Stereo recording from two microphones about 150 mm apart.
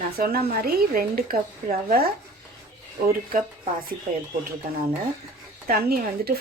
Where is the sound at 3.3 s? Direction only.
65° right (ahead or behind).